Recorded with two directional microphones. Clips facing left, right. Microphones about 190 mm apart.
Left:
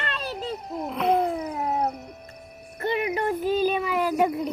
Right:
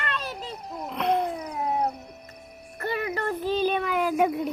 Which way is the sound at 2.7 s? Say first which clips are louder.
Left 3 dB; 20° left (ahead or behind).